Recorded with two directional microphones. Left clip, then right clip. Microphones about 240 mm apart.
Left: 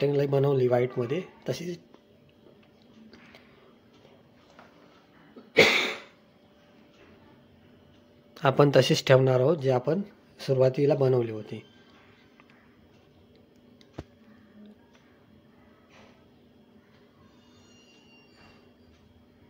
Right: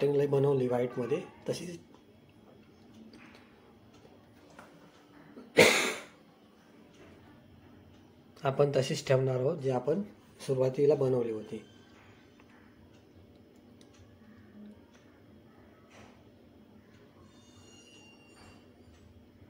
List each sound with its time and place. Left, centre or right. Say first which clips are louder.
0.0 s speech: left 2 dB; left
8.4 s speech: left 7 dB; left